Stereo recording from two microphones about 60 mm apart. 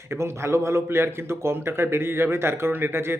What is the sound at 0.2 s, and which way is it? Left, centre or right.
A man's voice, right.